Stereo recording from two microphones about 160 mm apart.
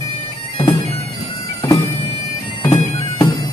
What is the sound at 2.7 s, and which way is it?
Bagpipes, 30° left (ahead or behind).